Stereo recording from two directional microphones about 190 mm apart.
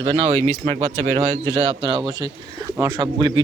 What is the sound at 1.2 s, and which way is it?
Speech, 20° left (ahead or behind).